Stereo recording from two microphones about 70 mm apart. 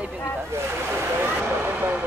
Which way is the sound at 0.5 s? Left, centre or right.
Right.